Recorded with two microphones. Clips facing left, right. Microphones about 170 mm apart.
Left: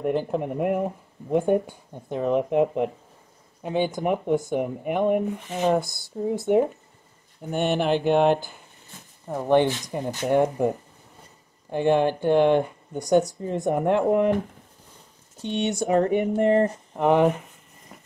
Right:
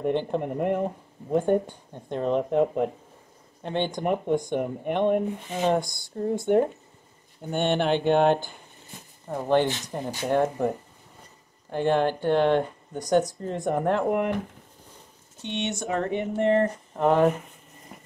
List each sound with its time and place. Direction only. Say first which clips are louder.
0.0 s speech: left 1 dB; 5° left (ahead or behind)
11.7 s speech: left 2 dB; 15° left (ahead or behind)
15.4 s speech: left 5 dB; 35° left (ahead or behind)
16.9 s speech: left 1 dB; 15° left (ahead or behind)